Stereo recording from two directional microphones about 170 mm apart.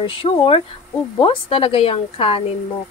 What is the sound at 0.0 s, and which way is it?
Speech, 30° left (ahead or behind).